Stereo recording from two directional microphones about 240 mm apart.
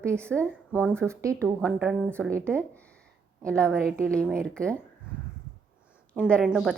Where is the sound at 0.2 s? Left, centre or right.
Centre.